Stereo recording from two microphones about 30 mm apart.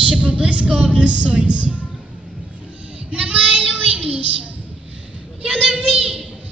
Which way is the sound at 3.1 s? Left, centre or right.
Right.